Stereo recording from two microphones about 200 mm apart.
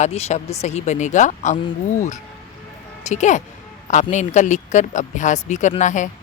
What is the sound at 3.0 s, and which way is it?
Speech, 35° left (ahead or behind).